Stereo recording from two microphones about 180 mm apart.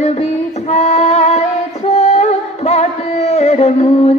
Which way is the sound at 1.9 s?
35° left (ahead or behind).